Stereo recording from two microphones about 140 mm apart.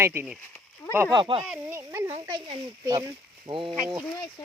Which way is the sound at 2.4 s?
30° right (ahead or behind).